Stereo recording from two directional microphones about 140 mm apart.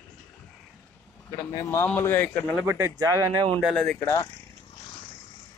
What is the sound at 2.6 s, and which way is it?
Speech, 15° right (ahead or behind).